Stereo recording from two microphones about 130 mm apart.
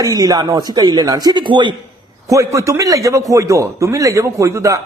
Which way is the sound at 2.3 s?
25° right (ahead or behind).